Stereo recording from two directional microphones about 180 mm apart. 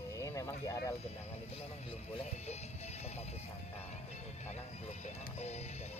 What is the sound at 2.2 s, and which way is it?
Speech, 35° left (ahead or behind).